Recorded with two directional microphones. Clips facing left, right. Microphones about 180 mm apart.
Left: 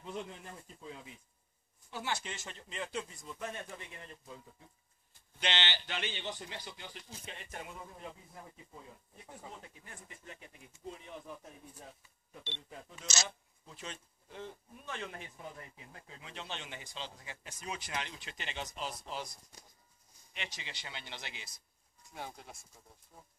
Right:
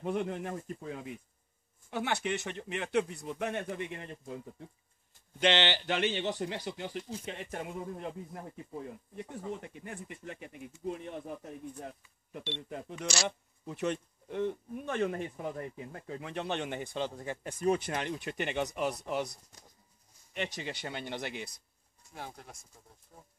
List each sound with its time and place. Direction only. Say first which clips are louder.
0.0 s speech: right 10 dB; 60° right (ahead or behind)
13.0 s speech: right 6 dB; 20° left (ahead or behind)
13.7 s speech: right 14 dB; 65° right (ahead or behind)
20.3 s speech: right 10 dB; 50° right (ahead or behind)
22.1 s speech: right 1 dB; centre (ahead or behind)